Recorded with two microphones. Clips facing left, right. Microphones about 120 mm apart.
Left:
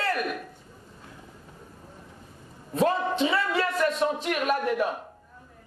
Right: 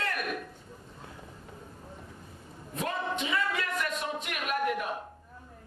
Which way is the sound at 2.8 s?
30° left (ahead or behind).